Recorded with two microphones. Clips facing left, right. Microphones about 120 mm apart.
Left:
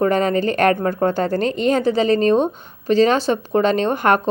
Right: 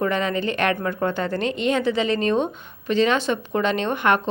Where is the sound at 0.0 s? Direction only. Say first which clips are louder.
Left 6 dB; 40° left (ahead or behind).